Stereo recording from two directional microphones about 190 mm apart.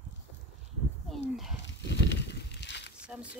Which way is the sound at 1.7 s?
65° left (ahead or behind).